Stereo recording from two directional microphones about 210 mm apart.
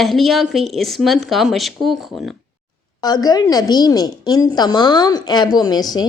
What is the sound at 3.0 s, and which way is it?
A woman's voice, 20° left (ahead or behind).